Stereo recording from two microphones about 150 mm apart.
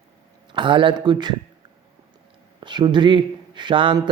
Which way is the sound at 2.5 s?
30° right (ahead or behind).